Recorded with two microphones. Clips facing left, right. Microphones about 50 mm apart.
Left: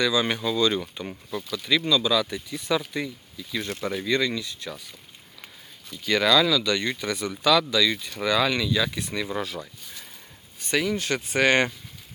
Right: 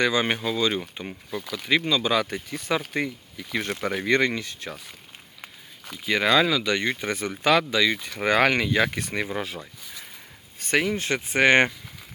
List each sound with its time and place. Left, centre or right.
0.0 s speech: right; by 1.5 s centre
1.5 s speech: right
2.8 s speech: right
6.2 s speech: right
10.6 s speech: right